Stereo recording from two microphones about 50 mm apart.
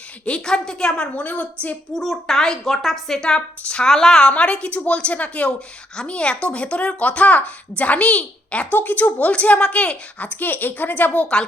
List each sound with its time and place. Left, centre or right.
0.3 s a woman's voice: centre
1.1 s a woman's voice: left
2.0 s a woman's voice: centre
3.2 s a woman's voice: centre
8.7 s a woman's voice: left